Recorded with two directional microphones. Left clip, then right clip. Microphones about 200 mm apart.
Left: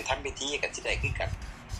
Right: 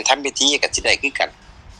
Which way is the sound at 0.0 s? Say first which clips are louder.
Right 15 dB; 60° right (ahead or behind).